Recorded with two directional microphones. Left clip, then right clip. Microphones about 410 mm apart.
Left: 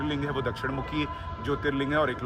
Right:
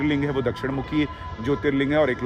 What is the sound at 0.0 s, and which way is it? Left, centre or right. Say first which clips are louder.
Speech: right 6 dB; centre.